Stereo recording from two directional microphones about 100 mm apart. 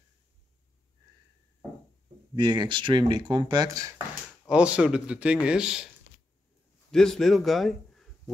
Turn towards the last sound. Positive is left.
turn(degrees=0)  # may be behind; listen again after turning